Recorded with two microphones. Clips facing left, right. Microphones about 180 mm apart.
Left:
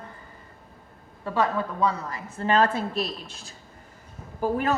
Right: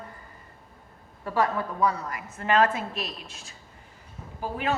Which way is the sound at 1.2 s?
25° left (ahead or behind).